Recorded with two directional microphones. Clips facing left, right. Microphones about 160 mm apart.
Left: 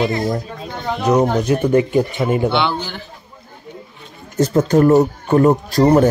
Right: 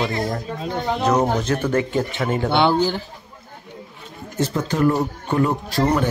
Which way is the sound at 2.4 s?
45° right (ahead or behind).